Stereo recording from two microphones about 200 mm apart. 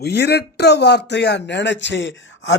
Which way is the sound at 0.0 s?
55° left (ahead or behind).